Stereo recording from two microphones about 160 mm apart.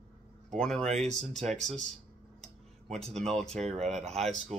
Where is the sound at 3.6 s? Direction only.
40° right (ahead or behind).